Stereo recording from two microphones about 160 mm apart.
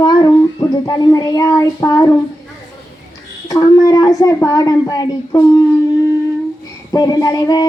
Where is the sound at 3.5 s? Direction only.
20° left (ahead or behind).